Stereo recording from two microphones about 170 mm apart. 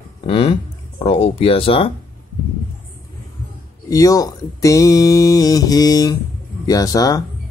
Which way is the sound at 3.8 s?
20° left (ahead or behind).